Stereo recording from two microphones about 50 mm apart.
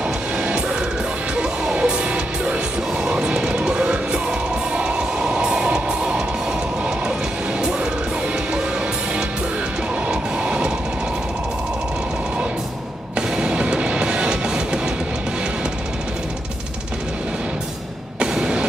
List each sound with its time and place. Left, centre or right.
0.0 s music: right
10.0 s train: centre
13.4 s music: centre
18.2 s music: centre